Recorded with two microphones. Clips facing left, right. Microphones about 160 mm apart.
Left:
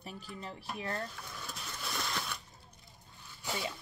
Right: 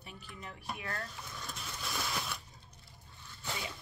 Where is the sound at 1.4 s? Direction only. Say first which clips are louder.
Even; centre (ahead or behind).